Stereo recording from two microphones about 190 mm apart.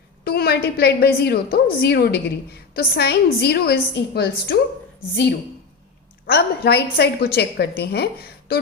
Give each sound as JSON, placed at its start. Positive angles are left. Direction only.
{"t": 0.3, "sound": "a woman's voice", "side_deg": 55}
{"t": 6.3, "sound": "a woman's voice", "side_deg": 60}